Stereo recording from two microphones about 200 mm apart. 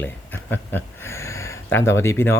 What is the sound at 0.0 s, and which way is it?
Speech, 10° left (ahead or behind).